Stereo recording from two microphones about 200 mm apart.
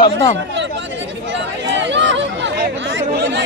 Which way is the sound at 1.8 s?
65° right (ahead or behind).